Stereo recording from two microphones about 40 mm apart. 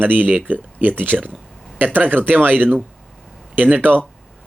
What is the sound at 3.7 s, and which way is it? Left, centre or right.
Speech, right.